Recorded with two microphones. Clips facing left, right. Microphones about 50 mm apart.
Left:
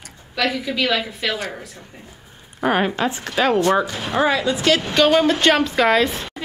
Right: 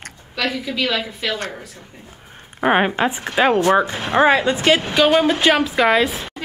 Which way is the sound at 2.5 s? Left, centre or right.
Right.